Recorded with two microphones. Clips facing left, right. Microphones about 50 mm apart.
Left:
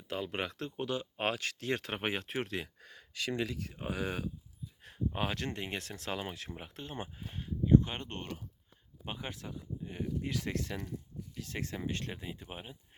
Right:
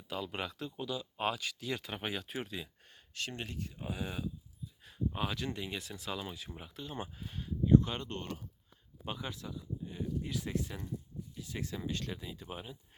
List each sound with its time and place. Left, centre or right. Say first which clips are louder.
0.1 s speech: left 2 dB; left
3.7 s speech: left 4 dB; left
4.8 s speech: left 1 dB; left
6.6 s speech: even; left
6.9 s speech: even; left
11.9 s speech: left 1 dB; left
12.5 s speech: right 1 dB; left